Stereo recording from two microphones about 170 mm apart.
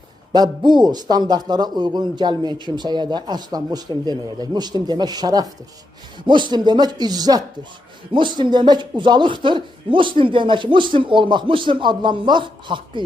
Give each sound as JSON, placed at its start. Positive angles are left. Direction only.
{"t": 0.3, "sound": "a man's voice", "side_deg": -25}